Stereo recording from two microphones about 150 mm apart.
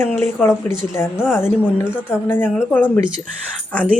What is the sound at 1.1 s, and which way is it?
Speech, 5° right (ahead or behind).